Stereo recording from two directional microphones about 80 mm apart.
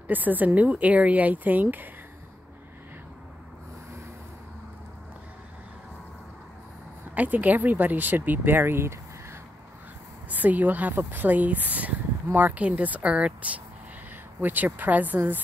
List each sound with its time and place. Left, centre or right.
0.1 s speech: right
7.2 s speech: right
10.3 s speech: right